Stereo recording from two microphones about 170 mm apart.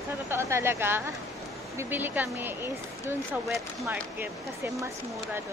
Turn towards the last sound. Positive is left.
turn(degrees=-10)  # may be behind; listen again after turning